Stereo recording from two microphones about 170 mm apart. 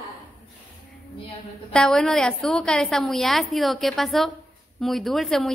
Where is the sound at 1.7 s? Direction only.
5° left (ahead or behind).